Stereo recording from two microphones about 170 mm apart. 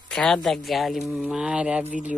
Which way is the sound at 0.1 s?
5° left (ahead or behind).